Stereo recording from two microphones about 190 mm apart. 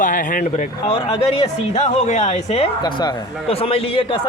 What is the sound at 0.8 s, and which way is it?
Speech, 30° left (ahead or behind).